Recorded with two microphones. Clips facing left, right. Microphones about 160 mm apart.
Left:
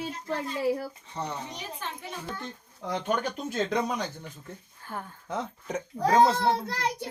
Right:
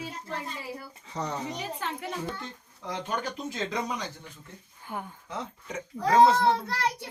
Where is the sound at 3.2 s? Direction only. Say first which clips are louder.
Left 3 dB; 55° left (ahead or behind).